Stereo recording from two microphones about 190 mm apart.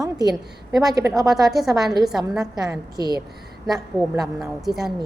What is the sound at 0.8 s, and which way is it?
Speech, 20° right (ahead or behind).